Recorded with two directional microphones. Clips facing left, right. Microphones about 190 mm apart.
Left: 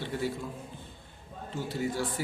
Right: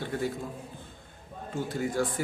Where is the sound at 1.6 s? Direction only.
50° right (ahead or behind).